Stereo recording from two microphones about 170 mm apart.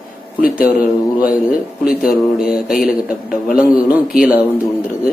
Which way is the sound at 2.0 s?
5° right (ahead or behind).